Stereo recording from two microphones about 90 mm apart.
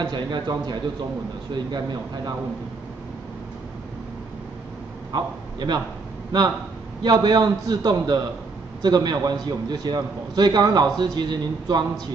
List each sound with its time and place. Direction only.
0.0 s a man's voice: 55° right (ahead or behind)
5.1 s a man's voice: 55° right (ahead or behind)
7.0 s a man's voice: 50° right (ahead or behind)